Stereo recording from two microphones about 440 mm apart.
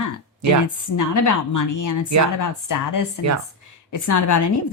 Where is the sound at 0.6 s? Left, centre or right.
Left.